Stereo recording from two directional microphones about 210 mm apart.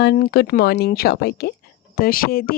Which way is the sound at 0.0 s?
50° left (ahead or behind).